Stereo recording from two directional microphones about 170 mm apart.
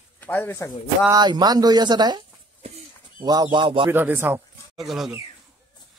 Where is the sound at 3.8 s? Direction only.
15° right (ahead or behind).